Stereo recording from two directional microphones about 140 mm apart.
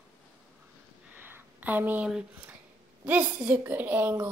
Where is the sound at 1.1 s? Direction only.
15° right (ahead or behind).